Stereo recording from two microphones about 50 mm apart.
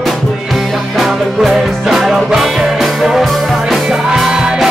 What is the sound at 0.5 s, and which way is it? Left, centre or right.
Music, centre.